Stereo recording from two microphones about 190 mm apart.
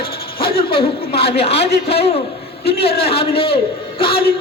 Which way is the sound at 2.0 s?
35° left (ahead or behind).